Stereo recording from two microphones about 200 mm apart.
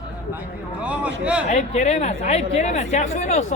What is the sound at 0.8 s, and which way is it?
Speech, 5° right (ahead or behind).